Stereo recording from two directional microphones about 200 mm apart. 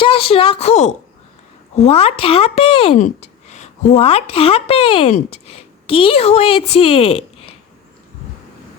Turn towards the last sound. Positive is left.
turn(degrees=30)  # may be behind; listen again after turning